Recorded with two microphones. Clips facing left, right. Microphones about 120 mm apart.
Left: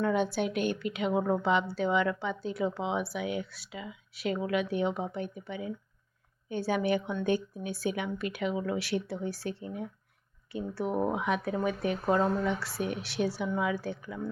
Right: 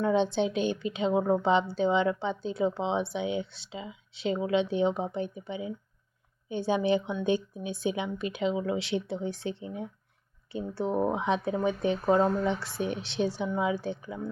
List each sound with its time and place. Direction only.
0.1 s a woman's voice: 25° right (ahead or behind)
12.0 s a woman's voice: 15° right (ahead or behind)